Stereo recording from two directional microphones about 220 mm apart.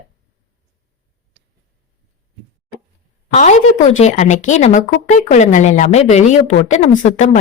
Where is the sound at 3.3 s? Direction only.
35° left (ahead or behind).